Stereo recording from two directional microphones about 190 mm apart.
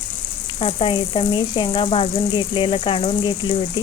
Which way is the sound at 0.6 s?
30° left (ahead or behind).